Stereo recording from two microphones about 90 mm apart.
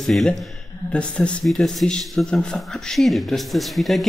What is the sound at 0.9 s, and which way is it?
Speech, 10° left (ahead or behind).